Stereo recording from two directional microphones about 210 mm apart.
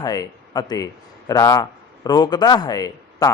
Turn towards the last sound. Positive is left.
turn(degrees=20)  # may be behind; listen again after turning